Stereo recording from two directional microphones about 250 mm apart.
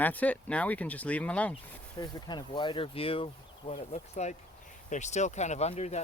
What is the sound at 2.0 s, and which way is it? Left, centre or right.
Speech, centre.